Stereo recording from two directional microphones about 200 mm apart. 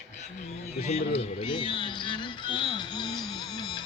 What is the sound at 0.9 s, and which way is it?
Speech, 30° left (ahead or behind).